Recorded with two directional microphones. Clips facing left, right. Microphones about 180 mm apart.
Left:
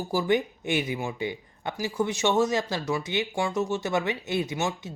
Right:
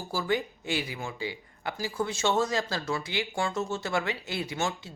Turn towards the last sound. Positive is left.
turn(degrees=20)  # may be behind; listen again after turning